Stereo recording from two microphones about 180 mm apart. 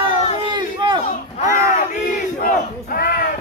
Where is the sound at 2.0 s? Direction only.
50° left (ahead or behind).